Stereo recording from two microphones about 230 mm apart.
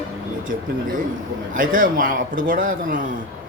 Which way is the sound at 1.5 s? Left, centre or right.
Right.